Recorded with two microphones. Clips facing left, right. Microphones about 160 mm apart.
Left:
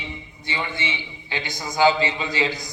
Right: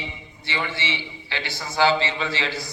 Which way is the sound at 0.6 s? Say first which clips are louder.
Right 1 dB; 20° left (ahead or behind).